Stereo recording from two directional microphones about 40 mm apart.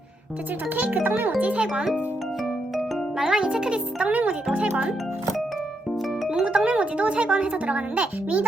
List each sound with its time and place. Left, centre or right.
1.0 s a child's voice: right
1.4 s speech: right
3.2 s a child's voice: centre
4.0 s speech: right
6.4 s speech: right